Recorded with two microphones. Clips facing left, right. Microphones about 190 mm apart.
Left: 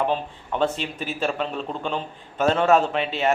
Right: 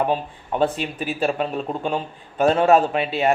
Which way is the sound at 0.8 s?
10° right (ahead or behind).